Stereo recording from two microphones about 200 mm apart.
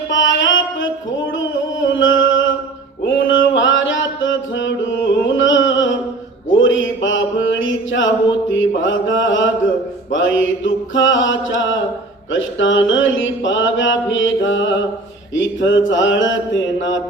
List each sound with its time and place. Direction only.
0.1 s music: 70° left (ahead or behind)
6.5 s mantra: 70° left (ahead or behind)